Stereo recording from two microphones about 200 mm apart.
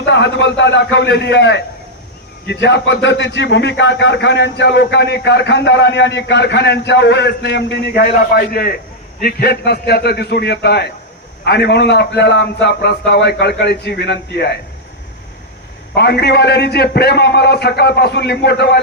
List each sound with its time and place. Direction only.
0.0 s a man's voice: 60° left (ahead or behind)
16.0 s a man's voice: 55° left (ahead or behind)